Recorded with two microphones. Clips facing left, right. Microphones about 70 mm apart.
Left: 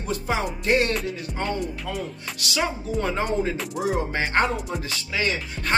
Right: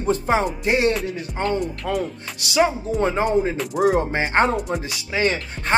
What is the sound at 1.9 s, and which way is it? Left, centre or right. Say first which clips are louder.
Speech: right 10 dB; right.